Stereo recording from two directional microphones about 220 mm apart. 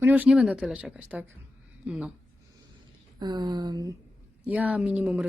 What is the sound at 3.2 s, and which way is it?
Speech, 20° right (ahead or behind).